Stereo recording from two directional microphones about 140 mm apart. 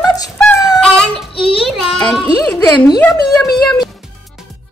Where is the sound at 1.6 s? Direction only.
Centre (ahead or behind).